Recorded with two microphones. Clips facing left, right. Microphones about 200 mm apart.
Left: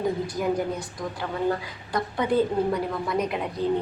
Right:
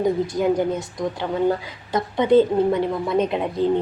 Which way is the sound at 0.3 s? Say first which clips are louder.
Right 6 dB; 25° right (ahead or behind).